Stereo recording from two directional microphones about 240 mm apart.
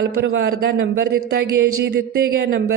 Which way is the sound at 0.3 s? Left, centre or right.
Right.